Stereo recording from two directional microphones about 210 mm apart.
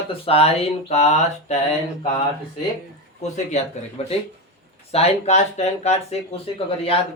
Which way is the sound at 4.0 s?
30° left (ahead or behind).